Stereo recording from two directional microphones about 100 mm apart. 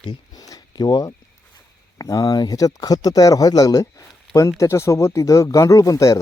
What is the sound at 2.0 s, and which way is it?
Speech, 35° left (ahead or behind).